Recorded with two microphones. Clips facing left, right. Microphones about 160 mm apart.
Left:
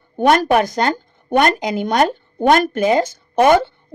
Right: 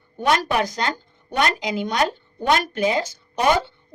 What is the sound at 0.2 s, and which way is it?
A woman's voice, 55° left (ahead or behind).